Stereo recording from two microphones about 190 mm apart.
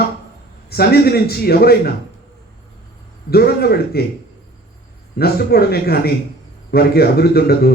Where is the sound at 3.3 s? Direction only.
55° left (ahead or behind).